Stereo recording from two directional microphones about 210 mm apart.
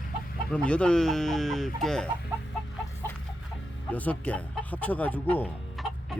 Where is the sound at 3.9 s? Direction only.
5° left (ahead or behind).